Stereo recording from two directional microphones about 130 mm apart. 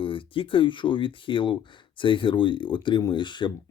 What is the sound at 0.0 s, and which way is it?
Speech, 40° left (ahead or behind).